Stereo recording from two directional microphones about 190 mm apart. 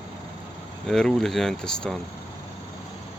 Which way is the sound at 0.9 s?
Centre (ahead or behind).